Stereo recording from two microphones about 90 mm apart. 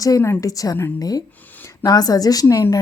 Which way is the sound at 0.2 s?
35° left (ahead or behind).